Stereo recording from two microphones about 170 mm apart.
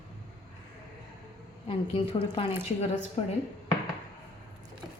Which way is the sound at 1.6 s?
35° left (ahead or behind).